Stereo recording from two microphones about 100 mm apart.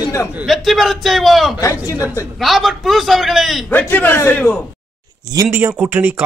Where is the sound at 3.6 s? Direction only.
15° left (ahead or behind).